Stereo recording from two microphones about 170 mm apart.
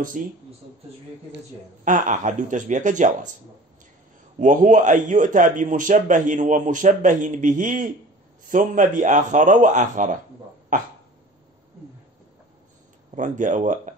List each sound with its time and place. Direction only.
0.2 s a man's voice: 50° right (ahead or behind)
1.9 s a man's voice: 50° right (ahead or behind)
4.4 s a man's voice: 50° right (ahead or behind)
13.1 s a man's voice: 45° right (ahead or behind)